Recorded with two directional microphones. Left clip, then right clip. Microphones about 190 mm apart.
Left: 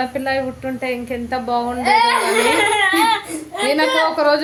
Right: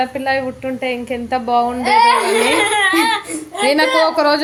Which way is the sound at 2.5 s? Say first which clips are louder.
Right 1 dB; 15° right (ahead or behind).